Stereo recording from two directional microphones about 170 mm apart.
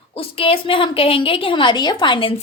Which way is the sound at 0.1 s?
35° left (ahead or behind).